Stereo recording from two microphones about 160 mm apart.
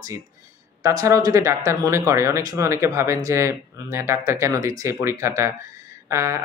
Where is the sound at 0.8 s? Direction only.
20° right (ahead or behind).